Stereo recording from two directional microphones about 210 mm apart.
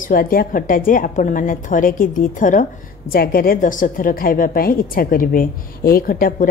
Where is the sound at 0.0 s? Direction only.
45° left (ahead or behind).